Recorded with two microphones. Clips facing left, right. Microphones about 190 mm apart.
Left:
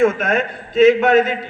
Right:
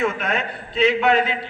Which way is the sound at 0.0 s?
45° left (ahead or behind).